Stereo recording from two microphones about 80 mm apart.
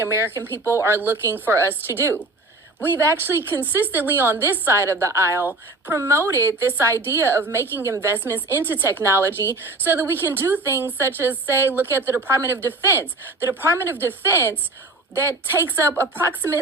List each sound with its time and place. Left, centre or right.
0.0 s a woman's voice: right
7.9 s a woman's voice: right
8.1 s a woman's voice: right